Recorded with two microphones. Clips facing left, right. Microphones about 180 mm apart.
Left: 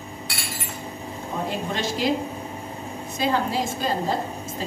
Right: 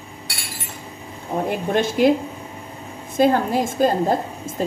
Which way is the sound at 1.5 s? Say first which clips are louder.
Right 8 dB; 55° right (ahead or behind).